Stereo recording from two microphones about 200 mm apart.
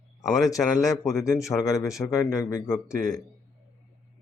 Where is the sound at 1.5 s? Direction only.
15° left (ahead or behind).